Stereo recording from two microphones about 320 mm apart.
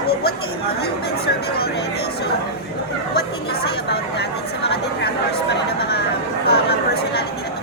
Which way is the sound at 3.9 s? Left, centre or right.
Left.